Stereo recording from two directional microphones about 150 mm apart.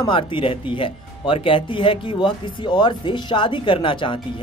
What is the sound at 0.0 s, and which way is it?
Speech, 35° left (ahead or behind).